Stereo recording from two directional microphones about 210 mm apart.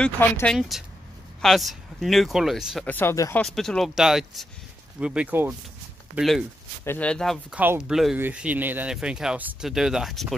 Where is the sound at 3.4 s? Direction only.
Centre (ahead or behind).